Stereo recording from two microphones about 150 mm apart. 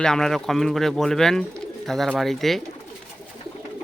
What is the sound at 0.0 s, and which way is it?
Speech, 5° left (ahead or behind).